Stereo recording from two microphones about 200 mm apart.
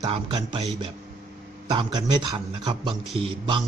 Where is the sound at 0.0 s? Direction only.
20° right (ahead or behind).